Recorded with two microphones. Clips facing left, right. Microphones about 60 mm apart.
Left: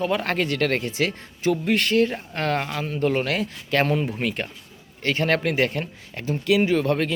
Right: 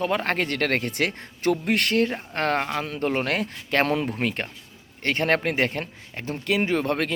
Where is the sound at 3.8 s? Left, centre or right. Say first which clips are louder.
Left 1 dB; right.